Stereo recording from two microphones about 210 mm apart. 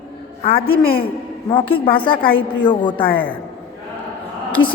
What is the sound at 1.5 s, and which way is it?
A woman's voice, 25° left (ahead or behind).